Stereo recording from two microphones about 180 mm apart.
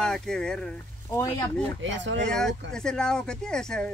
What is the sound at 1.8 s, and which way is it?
Speech, 90° right.